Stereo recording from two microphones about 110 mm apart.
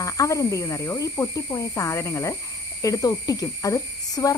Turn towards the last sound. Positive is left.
turn(degrees=30)  # may be behind; listen again after turning